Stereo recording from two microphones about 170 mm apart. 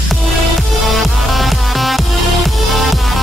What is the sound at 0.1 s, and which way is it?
Music, centre (ahead or behind).